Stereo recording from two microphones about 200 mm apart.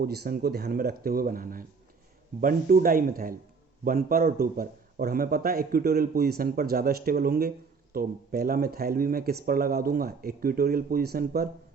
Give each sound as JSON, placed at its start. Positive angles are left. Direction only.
{"t": 0.0, "sound": "a man's voice", "side_deg": -50}